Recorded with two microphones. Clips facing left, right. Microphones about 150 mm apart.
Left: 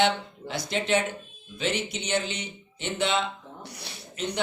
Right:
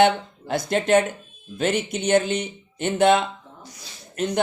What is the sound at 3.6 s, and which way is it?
Speech, 65° left (ahead or behind).